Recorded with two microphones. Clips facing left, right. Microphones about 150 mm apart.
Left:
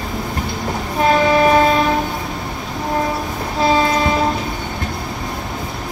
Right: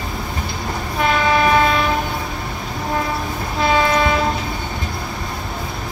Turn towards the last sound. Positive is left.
turn(degrees=35)  # may be behind; listen again after turning